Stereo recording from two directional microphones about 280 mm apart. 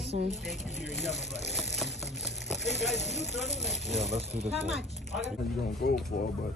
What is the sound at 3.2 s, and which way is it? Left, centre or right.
Speech, left.